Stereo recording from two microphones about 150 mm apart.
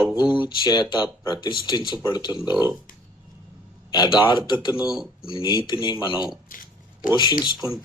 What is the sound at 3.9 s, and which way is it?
Speech, 30° left (ahead or behind).